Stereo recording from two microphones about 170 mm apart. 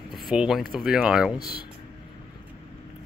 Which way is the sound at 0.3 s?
5° right (ahead or behind).